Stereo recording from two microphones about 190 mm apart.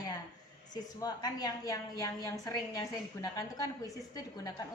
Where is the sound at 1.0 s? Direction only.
20° left (ahead or behind).